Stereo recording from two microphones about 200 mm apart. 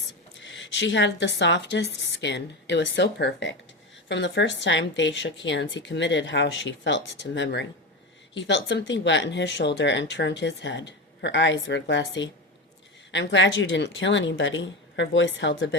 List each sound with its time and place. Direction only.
0.4 s a woman's voice: 65° left (ahead or behind)